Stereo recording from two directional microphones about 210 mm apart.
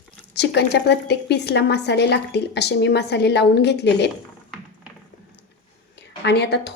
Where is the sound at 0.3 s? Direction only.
50° left (ahead or behind).